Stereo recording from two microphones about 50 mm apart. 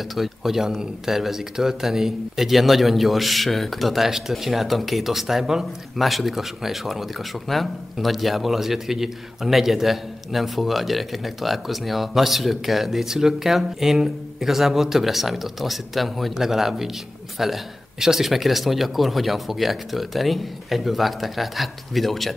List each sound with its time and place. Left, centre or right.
0.1 s speech: centre